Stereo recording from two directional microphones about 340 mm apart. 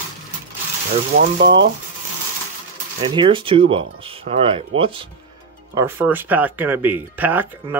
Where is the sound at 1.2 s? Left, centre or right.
Right.